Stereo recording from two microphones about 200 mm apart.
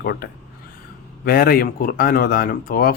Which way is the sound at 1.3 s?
50° left (ahead or behind).